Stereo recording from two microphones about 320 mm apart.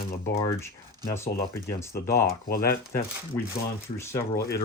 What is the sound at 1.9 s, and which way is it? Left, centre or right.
Speech, left.